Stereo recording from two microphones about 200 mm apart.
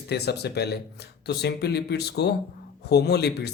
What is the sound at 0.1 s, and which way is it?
Speech, 55° left (ahead or behind).